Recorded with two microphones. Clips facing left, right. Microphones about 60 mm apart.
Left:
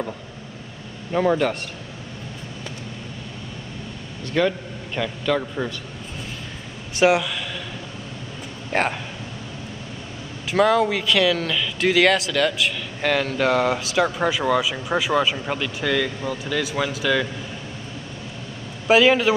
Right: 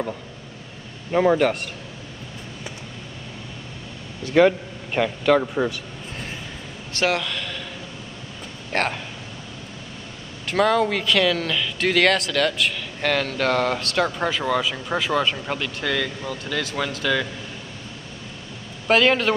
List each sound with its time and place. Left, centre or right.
1.1 s speech: centre
4.5 s a man's voice: right
6.9 s a man's voice: centre
8.7 s speech: centre
10.5 s speech: centre
18.9 s speech: centre